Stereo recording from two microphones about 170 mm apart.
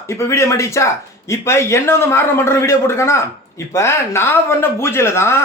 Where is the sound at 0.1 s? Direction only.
15° left (ahead or behind).